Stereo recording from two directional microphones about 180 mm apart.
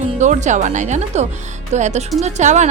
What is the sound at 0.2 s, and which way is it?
Speech, 40° right (ahead or behind).